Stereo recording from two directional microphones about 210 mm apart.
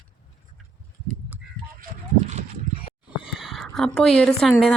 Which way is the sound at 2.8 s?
25° left (ahead or behind).